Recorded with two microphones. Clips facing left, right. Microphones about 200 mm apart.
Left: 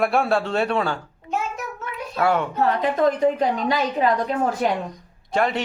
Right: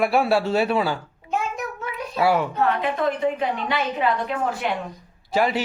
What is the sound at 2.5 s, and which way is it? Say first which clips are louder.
A woman's voice: left 2 dB; 35° left (ahead or behind).